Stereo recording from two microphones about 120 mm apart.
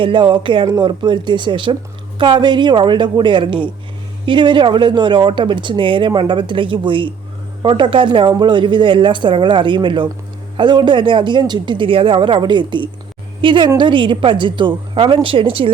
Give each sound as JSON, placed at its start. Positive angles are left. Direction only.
{"t": 0.0, "sound": "a woman's voice", "side_deg": -40}